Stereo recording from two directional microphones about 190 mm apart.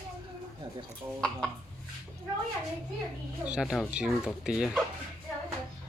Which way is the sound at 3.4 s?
5° right (ahead or behind).